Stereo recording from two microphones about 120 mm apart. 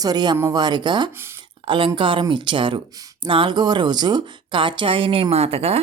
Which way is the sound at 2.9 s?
30° right (ahead or behind).